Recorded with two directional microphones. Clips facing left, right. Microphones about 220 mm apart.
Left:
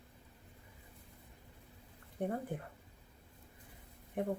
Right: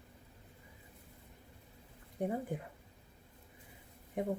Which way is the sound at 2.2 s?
15° right (ahead or behind).